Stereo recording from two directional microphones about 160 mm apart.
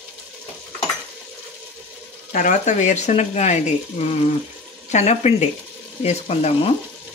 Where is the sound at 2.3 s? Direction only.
50° left (ahead or behind).